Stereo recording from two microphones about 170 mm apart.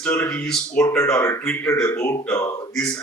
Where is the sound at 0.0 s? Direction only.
10° left (ahead or behind).